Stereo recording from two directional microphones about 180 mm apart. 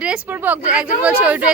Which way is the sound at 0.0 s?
5° right (ahead or behind).